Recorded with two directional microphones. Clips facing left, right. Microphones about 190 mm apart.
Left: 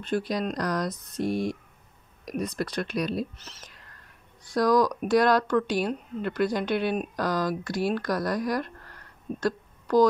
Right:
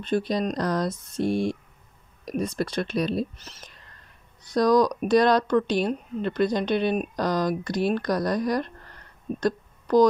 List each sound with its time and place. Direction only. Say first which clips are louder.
0.0 s speech: right 3 dB; 20° right (ahead or behind)
4.5 s speech: right 2 dB; 20° right (ahead or behind)
9.4 s a sound: right 2 dB; 20° right (ahead or behind)